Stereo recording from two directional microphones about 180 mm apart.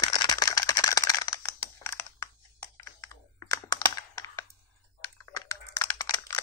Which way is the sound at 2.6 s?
15° left (ahead or behind).